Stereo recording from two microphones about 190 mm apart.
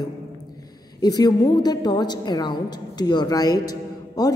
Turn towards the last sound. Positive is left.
turn(degrees=20)  # may be behind; listen again after turning